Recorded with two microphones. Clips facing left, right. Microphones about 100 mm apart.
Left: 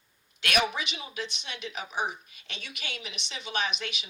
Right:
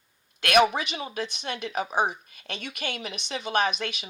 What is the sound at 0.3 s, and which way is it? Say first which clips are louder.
Speech: right 7 dB; 50° right (ahead or behind).